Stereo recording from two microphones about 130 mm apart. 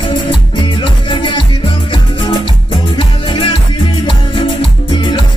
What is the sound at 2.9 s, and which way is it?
Music, 40° left (ahead or behind).